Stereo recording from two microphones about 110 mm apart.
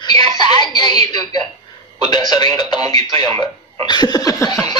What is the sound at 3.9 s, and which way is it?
Speech, 40° left (ahead or behind).